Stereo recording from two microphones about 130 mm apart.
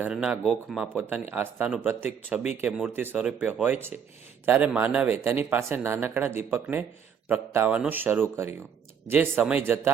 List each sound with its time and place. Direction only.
0.0 s speech: 5° right (ahead or behind)
1.3 s speech: 15° right (ahead or behind)